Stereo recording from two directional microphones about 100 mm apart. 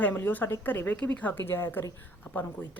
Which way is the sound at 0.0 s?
20° left (ahead or behind).